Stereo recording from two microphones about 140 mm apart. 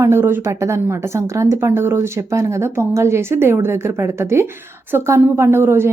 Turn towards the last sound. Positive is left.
turn(degrees=-15)  # may be behind; listen again after turning